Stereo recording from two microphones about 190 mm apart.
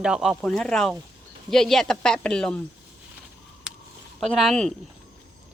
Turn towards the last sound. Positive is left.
turn(degrees=0)  # may be behind; listen again after turning